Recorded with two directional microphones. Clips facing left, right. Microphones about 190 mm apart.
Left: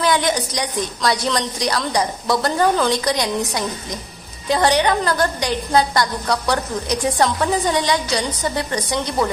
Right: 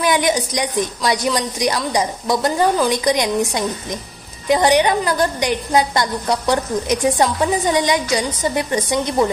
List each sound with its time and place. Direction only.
0.0 s a woman's voice: 15° right (ahead or behind)